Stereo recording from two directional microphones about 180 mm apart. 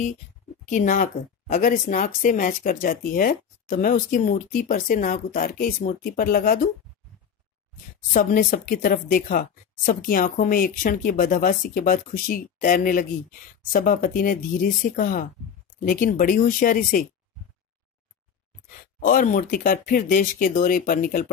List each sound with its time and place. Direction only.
0.7 s a woman's voice: 45° left (ahead or behind)
5.5 s speech: 70° left (ahead or behind)
5.9 s a woman's voice: 50° left (ahead or behind)
8.1 s a woman's voice: 50° left (ahead or behind)
18.9 s a woman's voice: 45° left (ahead or behind)